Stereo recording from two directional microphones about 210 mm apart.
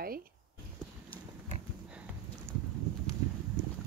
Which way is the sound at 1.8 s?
5° right (ahead or behind).